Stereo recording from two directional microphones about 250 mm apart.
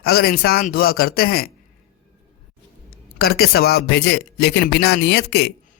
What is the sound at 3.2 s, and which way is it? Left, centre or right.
A man's voice, left.